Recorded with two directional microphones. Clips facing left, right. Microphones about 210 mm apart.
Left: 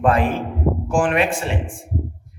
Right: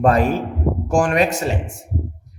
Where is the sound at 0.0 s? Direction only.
40° right (ahead or behind).